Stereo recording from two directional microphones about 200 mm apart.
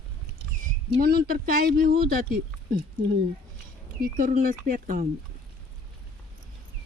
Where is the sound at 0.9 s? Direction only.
50° right (ahead or behind).